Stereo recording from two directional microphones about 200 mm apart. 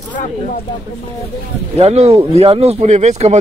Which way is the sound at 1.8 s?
30° right (ahead or behind).